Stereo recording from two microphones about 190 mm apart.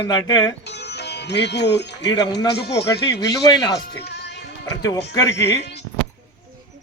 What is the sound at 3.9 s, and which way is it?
Music, 60° left (ahead or behind).